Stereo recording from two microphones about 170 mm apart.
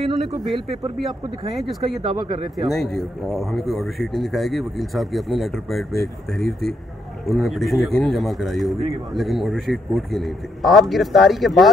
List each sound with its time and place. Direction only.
0.0 s speech: centre (ahead or behind)
2.0 s speech: 25° right (ahead or behind)
2.5 s speech: centre (ahead or behind)
7.2 s speech: centre (ahead or behind)